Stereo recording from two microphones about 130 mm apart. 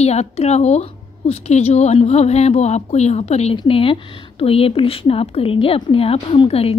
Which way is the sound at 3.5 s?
45° left (ahead or behind).